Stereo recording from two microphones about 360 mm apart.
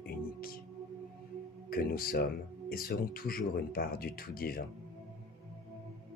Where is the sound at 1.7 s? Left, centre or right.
Left.